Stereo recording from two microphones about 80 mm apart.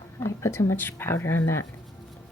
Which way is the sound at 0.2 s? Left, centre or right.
Left.